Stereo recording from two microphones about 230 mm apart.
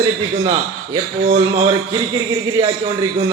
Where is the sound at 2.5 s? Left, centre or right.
Centre.